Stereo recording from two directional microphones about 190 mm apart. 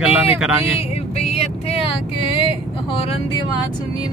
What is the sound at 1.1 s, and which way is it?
Vehicle, 30° left (ahead or behind).